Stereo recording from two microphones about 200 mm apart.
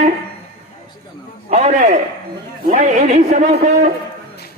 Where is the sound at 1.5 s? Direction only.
35° right (ahead or behind).